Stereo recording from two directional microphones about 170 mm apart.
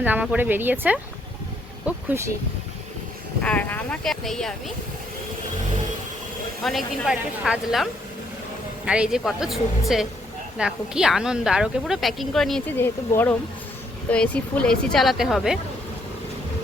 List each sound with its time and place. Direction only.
0.0 s speech: 10° right (ahead or behind)
2.0 s speech: 15° right (ahead or behind)
3.4 s speech: 10° left (ahead or behind)
6.7 s a woman's voice: centre (ahead or behind)